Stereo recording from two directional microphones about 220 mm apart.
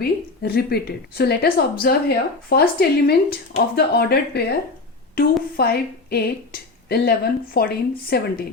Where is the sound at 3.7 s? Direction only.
45° left (ahead or behind).